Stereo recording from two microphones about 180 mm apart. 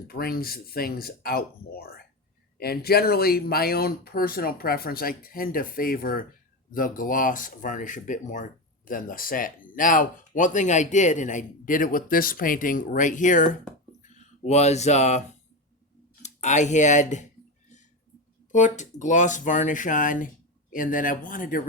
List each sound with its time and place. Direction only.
0.1 s speech: 55° left (ahead or behind)
18.5 s speech: 40° left (ahead or behind)